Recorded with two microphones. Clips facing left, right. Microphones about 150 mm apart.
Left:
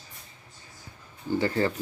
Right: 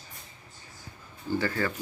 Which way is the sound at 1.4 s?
25° left (ahead or behind).